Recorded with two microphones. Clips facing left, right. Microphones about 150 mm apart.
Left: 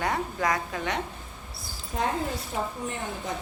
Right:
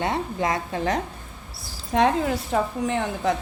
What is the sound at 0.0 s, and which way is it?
Speech, 25° right (ahead or behind).